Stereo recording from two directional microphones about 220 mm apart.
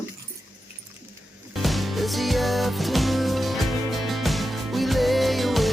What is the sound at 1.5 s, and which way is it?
Music, centre (ahead or behind).